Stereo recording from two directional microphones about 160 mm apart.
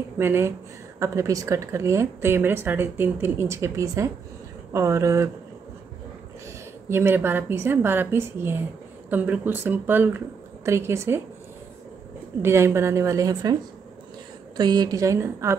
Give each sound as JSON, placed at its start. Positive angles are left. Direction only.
{"t": 0.2, "sound": "a woman's voice", "side_deg": -15}
{"t": 6.9, "sound": "a woman's voice", "side_deg": -15}
{"t": 12.4, "sound": "a woman's voice", "side_deg": -15}
{"t": 14.6, "sound": "a woman's voice", "side_deg": -25}